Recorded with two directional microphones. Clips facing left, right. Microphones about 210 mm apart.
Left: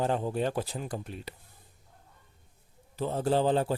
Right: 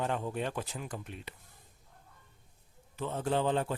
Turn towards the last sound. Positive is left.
turn(degrees=35)  # may be behind; listen again after turning